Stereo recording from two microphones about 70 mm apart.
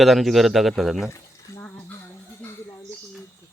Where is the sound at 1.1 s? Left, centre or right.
Left.